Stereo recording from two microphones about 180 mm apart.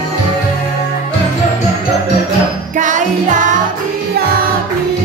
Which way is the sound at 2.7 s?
45° right (ahead or behind).